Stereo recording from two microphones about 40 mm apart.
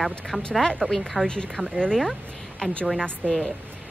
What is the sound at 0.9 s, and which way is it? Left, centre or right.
Speech, centre.